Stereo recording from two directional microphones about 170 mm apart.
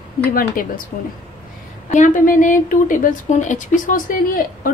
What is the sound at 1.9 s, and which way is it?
A woman's voice, 50° left (ahead or behind).